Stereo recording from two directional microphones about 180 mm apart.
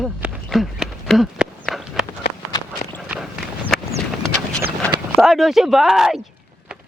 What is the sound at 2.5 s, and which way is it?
Walk, 25° left (ahead or behind).